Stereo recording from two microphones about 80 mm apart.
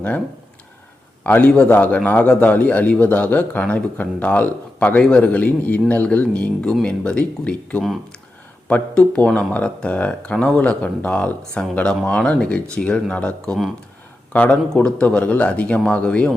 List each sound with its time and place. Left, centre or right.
1.2 s a man's voice: centre